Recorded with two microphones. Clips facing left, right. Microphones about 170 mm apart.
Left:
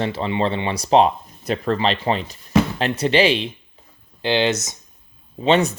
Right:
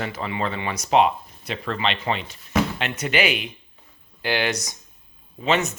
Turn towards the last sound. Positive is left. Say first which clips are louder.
# left 5 dB
turn(degrees=30)  # may be behind; listen again after turning